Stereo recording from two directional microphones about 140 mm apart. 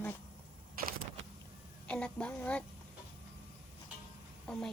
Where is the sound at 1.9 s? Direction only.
10° left (ahead or behind).